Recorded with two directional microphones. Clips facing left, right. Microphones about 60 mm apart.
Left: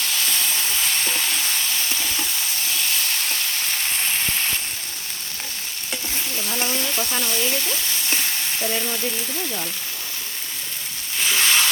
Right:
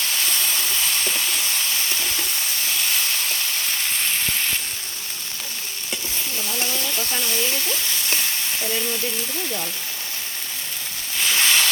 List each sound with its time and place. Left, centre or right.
6.5 s speech: left
6.7 s speech: centre
11.3 s a sound: centre